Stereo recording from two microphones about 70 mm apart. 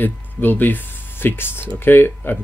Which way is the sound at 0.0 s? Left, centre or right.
Left.